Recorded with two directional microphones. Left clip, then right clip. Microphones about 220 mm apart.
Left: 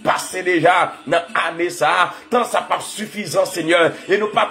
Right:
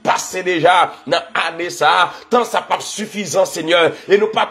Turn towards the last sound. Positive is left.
turn(degrees=-20)  # may be behind; listen again after turning